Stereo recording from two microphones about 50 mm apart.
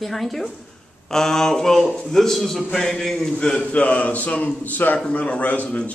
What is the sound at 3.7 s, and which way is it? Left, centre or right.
A man's voice, left.